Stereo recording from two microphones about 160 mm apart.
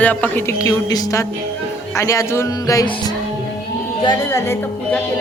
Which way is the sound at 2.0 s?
20° left (ahead or behind).